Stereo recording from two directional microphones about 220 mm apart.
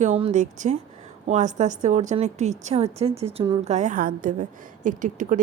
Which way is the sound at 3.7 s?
35° right (ahead or behind).